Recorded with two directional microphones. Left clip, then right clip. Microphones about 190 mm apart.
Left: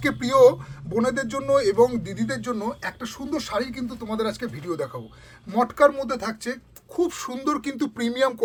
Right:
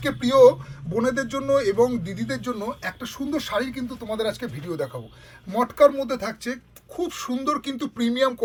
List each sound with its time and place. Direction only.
0.0 s speech: 30° left (ahead or behind)